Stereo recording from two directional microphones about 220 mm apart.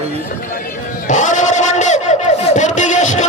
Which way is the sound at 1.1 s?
35° left (ahead or behind).